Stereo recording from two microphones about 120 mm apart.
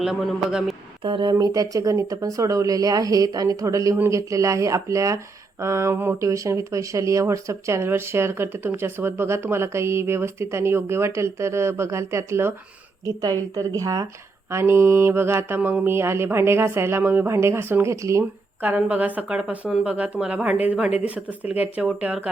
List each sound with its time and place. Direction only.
0.0 s a man's voice: 5° right (ahead or behind)
1.0 s speech: 40° right (ahead or behind); by 18.3 s 25° right (ahead or behind)
18.6 s a woman's voice: 10° right (ahead or behind)